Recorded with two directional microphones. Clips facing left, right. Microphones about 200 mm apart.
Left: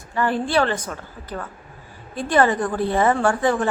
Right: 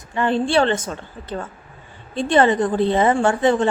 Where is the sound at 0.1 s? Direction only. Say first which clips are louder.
Right 2 dB; 20° right (ahead or behind).